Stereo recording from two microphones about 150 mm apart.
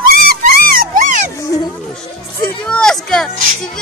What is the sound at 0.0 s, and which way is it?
Dog, 80° right.